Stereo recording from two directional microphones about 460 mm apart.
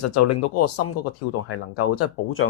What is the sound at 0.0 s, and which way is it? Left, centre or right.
Speech, left.